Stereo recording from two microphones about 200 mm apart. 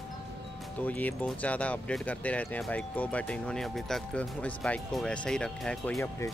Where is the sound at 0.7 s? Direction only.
10° left (ahead or behind).